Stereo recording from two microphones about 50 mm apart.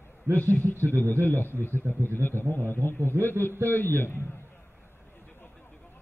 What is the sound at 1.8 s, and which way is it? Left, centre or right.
Speech, right.